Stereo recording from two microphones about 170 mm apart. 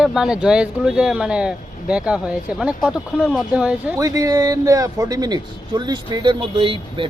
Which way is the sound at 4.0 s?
20° right (ahead or behind).